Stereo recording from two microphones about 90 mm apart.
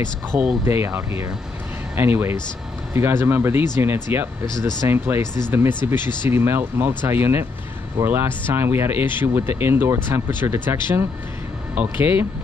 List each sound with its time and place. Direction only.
0.3 s speech: 20° right (ahead or behind)